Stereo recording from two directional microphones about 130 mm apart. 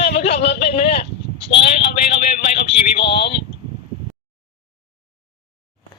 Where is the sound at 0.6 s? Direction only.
50° left (ahead or behind).